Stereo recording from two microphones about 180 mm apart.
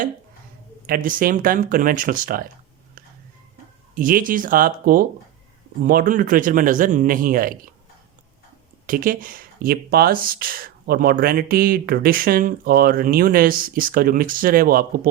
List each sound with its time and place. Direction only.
0.9 s speech: 50° right (ahead or behind)
3.9 s speech: 50° right (ahead or behind)
8.9 s speech: 50° right (ahead or behind)